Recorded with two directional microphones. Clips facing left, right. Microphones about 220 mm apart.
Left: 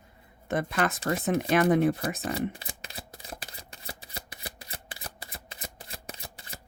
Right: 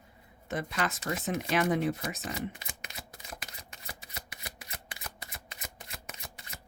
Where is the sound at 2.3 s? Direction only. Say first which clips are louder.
Left 6 dB; 30° left (ahead or behind).